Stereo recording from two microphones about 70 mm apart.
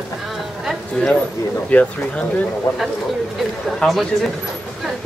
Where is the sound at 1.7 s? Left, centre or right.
Centre.